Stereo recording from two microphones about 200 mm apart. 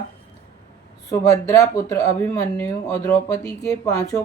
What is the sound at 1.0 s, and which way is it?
Speech, 15° left (ahead or behind).